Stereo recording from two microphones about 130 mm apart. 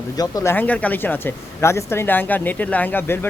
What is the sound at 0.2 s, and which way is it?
Speech, 30° left (ahead or behind).